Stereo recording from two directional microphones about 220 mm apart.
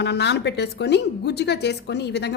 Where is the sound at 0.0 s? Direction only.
50° left (ahead or behind).